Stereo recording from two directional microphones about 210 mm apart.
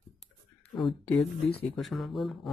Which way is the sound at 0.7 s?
5° left (ahead or behind).